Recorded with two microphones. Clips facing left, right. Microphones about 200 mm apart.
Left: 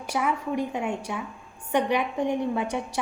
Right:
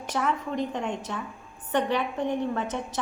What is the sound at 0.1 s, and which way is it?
A woman's voice, 10° left (ahead or behind).